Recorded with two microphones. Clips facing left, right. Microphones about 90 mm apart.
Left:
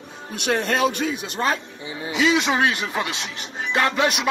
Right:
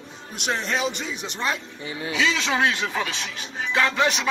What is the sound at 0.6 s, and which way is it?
Speech, 50° left (ahead or behind).